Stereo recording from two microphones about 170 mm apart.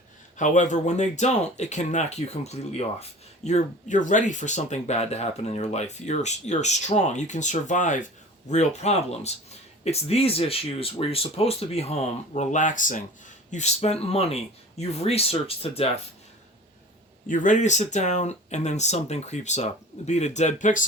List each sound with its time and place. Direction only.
0.3 s speech: 45° left (ahead or behind)
17.2 s speech: 50° left (ahead or behind)